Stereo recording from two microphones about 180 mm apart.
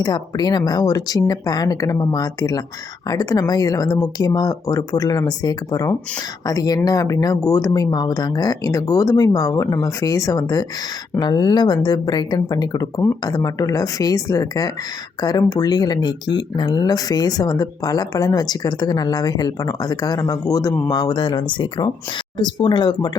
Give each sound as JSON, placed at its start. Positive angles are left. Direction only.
{"t": 0.0, "sound": "speech", "side_deg": 25}